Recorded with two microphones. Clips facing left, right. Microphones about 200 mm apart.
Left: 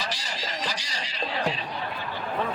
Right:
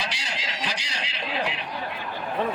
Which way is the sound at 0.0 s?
60° right (ahead or behind).